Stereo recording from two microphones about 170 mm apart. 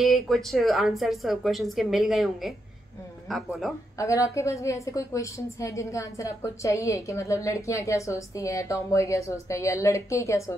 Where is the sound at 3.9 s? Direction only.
20° left (ahead or behind).